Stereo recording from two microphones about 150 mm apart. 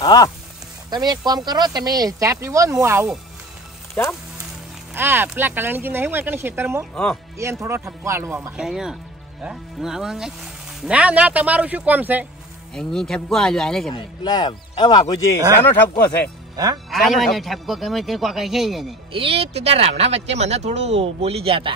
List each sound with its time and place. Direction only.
0.0 s speech: 25° left (ahead or behind)
0.8 s speech: 25° right (ahead or behind)
4.0 s speech: 10° left (ahead or behind)
4.9 s speech: 15° right (ahead or behind)
8.5 s a man's voice: 5° right (ahead or behind)
12.7 s a man's voice: 5° left (ahead or behind)
13.9 s speech: 30° left (ahead or behind)
16.5 s speech: 25° right (ahead or behind)
16.9 s a man's voice: centre (ahead or behind)
19.1 s speech: 40° right (ahead or behind)